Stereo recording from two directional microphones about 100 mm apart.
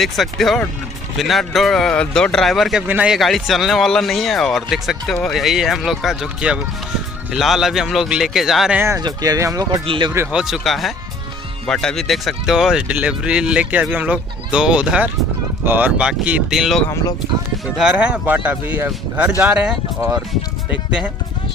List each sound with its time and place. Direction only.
0.0 s speech: centre (ahead or behind)
2.9 s speech: 15° right (ahead or behind)
3.2 s speech: centre (ahead or behind)
9.0 s speech: 40° right (ahead or behind)
9.8 s speech: 55° right (ahead or behind)
10.3 s speech: 5° right (ahead or behind)